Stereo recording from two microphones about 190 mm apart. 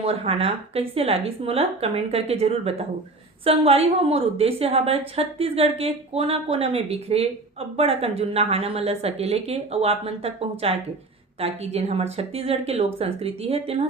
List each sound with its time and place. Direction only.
0.0 s a woman's voice: 30° right (ahead or behind)